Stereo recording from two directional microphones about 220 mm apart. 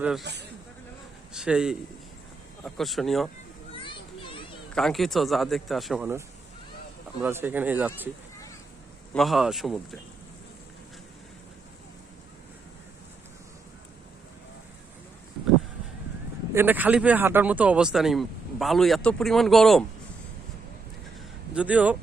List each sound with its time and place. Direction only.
0.2 s a man's voice: 50° right (ahead or behind)
1.3 s speech: 5° right (ahead or behind)
3.8 s children playing: 25° left (ahead or behind)
4.7 s speech: centre (ahead or behind)
9.1 s speech: centre (ahead or behind)
16.6 s speech: 10° right (ahead or behind)
21.5 s speech: 5° right (ahead or behind)